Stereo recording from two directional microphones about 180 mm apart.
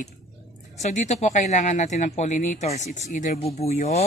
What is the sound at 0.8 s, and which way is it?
Speech, 40° left (ahead or behind).